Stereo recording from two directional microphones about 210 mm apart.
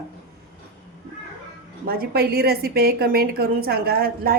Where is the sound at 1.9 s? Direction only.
45° right (ahead or behind).